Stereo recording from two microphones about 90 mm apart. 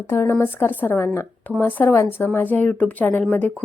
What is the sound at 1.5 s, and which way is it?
A woman's voice, 20° left (ahead or behind).